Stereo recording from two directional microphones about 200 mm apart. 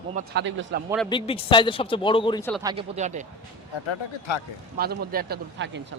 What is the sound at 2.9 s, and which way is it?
Speech, 35° right (ahead or behind).